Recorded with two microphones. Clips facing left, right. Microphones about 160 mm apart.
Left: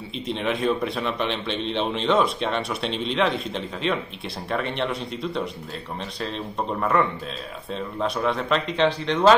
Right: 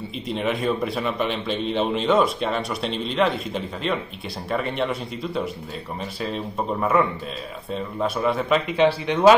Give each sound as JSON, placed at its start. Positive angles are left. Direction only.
{"t": 0.3, "sound": "a man's voice", "side_deg": 0}